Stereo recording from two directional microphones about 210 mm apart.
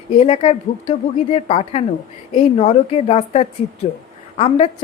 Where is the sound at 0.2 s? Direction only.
30° left (ahead or behind).